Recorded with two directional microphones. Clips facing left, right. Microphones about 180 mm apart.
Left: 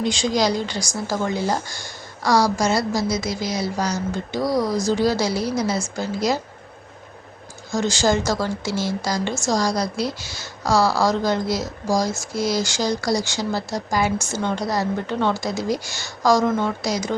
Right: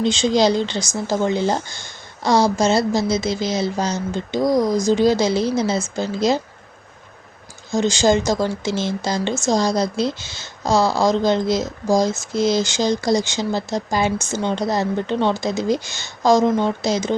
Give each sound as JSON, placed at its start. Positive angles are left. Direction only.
{"t": 0.0, "sound": "a woman's voice", "side_deg": -25}
{"t": 7.7, "sound": "a woman's voice", "side_deg": -20}